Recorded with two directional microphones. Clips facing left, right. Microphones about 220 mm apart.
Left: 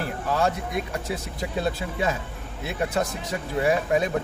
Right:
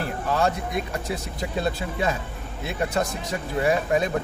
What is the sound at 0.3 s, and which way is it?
A man's voice, 5° left (ahead or behind).